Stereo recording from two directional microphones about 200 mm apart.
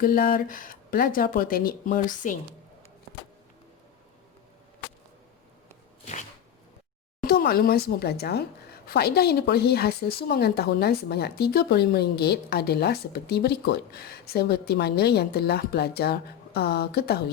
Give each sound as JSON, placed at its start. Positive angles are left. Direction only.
{"t": 0.0, "sound": "speech", "side_deg": 45}
{"t": 7.2, "sound": "speech", "side_deg": 50}